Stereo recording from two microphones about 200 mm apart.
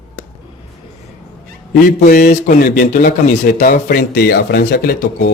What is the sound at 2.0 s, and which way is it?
Speech, 40° left (ahead or behind).